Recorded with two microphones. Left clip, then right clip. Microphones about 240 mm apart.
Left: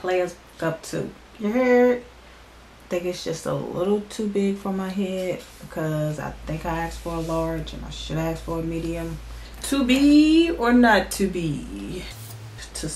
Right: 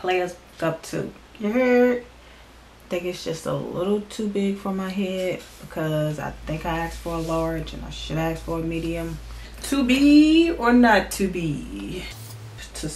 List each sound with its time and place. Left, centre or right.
0.0 s speech: centre
7.3 s speech: centre